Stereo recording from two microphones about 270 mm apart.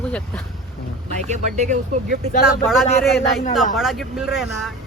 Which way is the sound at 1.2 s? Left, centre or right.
Right.